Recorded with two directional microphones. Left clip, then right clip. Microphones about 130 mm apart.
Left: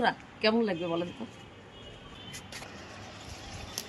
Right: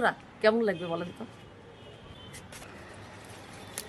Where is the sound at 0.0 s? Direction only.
15° right (ahead or behind).